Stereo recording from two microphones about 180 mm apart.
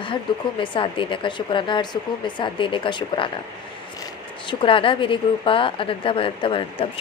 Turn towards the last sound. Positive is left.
turn(degrees=30)  # may be behind; listen again after turning